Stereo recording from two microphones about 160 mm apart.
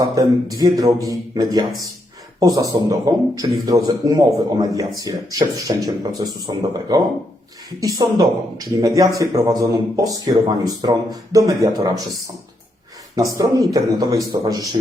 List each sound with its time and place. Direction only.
0.0 s a man's voice: 20° right (ahead or behind)
2.7 s a man's voice: 20° right (ahead or behind)
13.1 s a man's voice: 20° right (ahead or behind)